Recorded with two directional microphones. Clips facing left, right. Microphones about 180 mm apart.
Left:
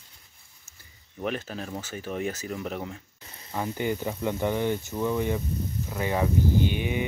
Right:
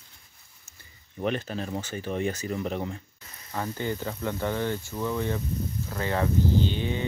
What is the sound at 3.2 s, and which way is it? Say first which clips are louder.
Frying: left 2 dB; 30° left (ahead or behind).